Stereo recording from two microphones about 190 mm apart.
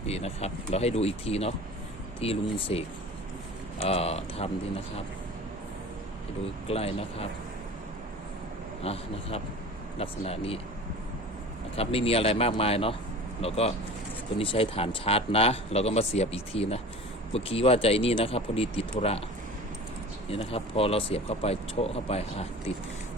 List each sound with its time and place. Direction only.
0.0 s speech: 35° left (ahead or behind)
6.7 s speech: 30° left (ahead or behind)
8.8 s speech: 30° left (ahead or behind)
11.8 s speech: 30° left (ahead or behind)
20.3 s speech: 30° left (ahead or behind)